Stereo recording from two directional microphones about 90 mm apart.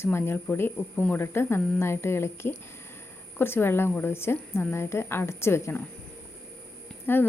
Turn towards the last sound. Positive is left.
turn(degrees=20)  # may be behind; listen again after turning